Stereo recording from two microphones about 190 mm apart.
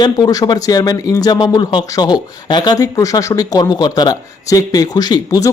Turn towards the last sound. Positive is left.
turn(degrees=20)  # may be behind; listen again after turning